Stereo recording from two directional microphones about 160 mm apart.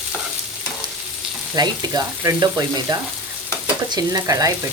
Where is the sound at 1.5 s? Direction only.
25° right (ahead or behind).